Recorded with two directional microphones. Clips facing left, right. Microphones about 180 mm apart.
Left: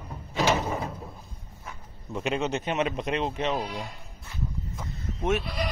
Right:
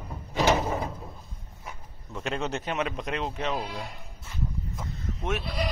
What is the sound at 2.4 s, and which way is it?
Speech, centre (ahead or behind).